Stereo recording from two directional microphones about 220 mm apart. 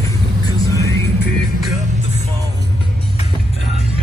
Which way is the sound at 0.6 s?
15° left (ahead or behind).